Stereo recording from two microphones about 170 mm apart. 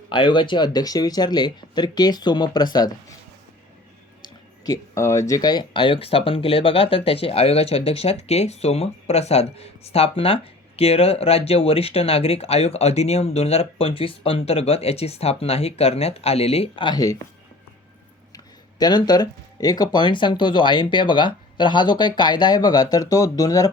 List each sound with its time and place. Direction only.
0.1 s speech: 30° left (ahead or behind)
4.2 s a sound: 20° left (ahead or behind)
5.3 s speech: 25° left (ahead or behind)
18.8 s speech: 25° left (ahead or behind)